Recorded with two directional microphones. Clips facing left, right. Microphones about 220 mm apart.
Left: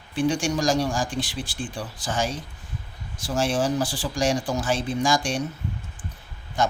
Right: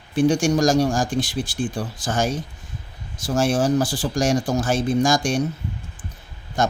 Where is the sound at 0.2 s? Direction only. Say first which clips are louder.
Right 6 dB; 45° right (ahead or behind).